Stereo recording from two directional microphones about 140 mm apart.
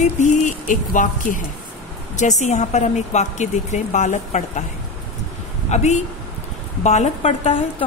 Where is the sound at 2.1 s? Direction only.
55° left (ahead or behind).